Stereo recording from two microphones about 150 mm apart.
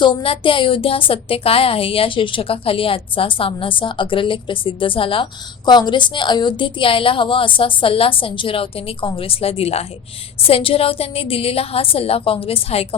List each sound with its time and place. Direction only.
0.0 s a woman's voice: 35° left (ahead or behind)